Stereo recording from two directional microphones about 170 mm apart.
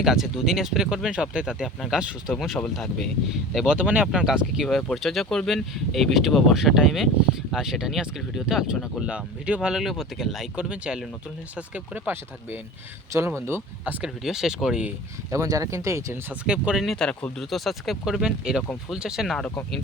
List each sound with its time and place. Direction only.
0.0 s speech: centre (ahead or behind)
15.3 s speech: 20° right (ahead or behind)
16.5 s speech: 5° right (ahead or behind)